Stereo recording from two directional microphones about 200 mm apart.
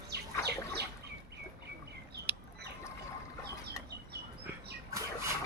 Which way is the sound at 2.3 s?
5° right (ahead or behind).